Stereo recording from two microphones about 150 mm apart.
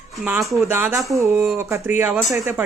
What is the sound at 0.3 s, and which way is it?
Speech, 15° right (ahead or behind).